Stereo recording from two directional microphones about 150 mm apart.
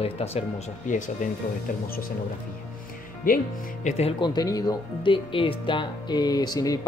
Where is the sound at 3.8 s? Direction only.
45° left (ahead or behind).